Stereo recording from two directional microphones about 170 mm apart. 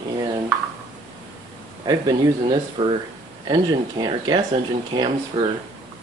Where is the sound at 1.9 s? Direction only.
25° right (ahead or behind).